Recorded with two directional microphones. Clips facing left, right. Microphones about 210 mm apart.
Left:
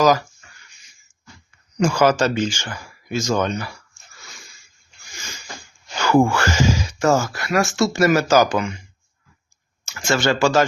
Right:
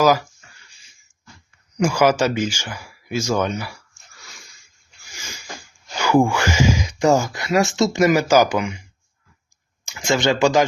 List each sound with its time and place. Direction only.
0.0 s speech: 10° right (ahead or behind)
1.7 s speech: 10° right (ahead or behind)
6.0 s speech: 10° right (ahead or behind)
9.8 s speech: 15° right (ahead or behind)